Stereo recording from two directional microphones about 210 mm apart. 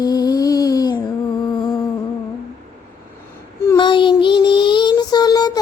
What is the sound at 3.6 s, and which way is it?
Child singing, 20° left (ahead or behind).